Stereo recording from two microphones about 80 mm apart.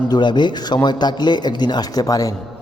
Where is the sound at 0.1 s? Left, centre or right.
Left.